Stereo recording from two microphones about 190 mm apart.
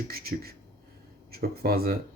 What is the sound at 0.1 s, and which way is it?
Speech, 55° right (ahead or behind).